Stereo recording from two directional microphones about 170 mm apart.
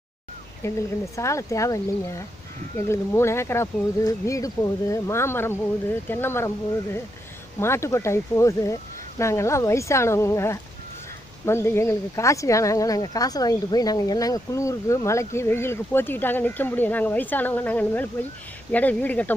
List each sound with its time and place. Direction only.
0.6 s speech: 15° left (ahead or behind)